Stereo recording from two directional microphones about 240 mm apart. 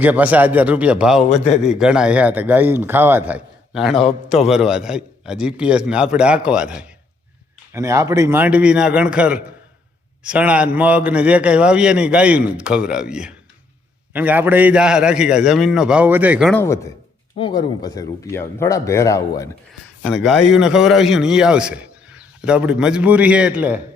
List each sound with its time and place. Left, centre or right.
0.0 s a man's voice: centre
1.3 s a man's voice: left
1.7 s a man's voice: centre
16.6 s speech: centre
20.1 s a man's voice: centre